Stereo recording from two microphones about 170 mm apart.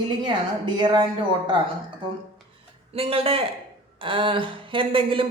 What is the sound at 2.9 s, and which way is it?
A woman's voice, 35° right (ahead or behind).